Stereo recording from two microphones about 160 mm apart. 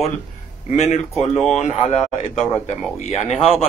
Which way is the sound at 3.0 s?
45° left (ahead or behind).